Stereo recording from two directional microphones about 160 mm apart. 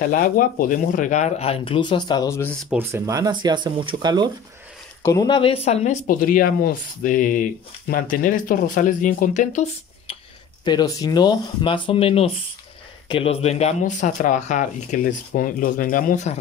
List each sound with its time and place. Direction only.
0.0 s speech: 60° left (ahead or behind); by 2.5 s 15° left (ahead or behind)
2.7 s speech: 15° right (ahead or behind)
5.0 s speech: 25° left (ahead or behind); by 5.9 s 40° left (ahead or behind)
6.0 s speech: 60° left (ahead or behind); by 10.1 s 45° left (ahead or behind)
10.6 s speech: 25° left (ahead or behind); by 16.3 s 50° left (ahead or behind)